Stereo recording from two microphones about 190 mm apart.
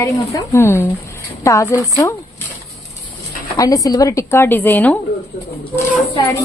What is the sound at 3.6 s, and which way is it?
Speech, 20° left (ahead or behind).